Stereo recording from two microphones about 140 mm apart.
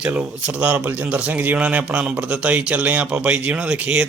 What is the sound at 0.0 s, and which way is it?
Speech, 10° right (ahead or behind).